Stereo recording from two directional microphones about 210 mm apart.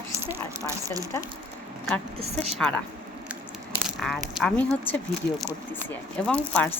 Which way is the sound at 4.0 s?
Centre (ahead or behind).